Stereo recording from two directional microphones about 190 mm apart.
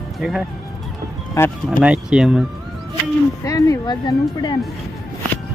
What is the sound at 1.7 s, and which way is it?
Speech, 5° right (ahead or behind).